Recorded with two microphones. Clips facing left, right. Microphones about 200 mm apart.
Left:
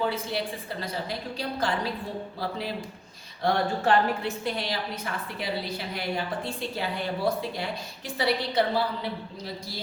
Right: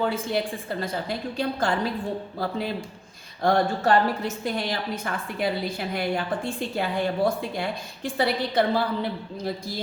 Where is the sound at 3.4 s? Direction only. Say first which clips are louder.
Right 3 dB; 40° right (ahead or behind).